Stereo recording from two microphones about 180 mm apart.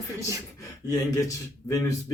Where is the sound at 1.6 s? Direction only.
15° left (ahead or behind).